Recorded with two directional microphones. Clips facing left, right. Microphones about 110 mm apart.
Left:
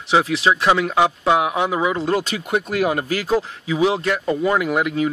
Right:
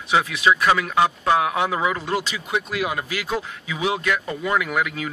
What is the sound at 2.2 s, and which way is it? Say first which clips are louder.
Speech: left 4 dB; 50° left (ahead or behind).